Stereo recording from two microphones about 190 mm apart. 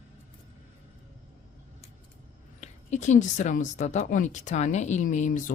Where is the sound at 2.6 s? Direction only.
40° left (ahead or behind).